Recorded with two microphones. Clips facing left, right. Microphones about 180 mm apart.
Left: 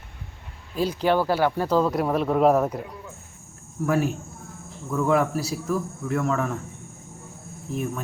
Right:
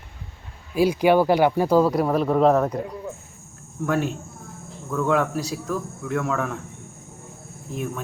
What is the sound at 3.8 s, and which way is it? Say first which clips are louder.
Speech: left 1 dB; centre (ahead or behind).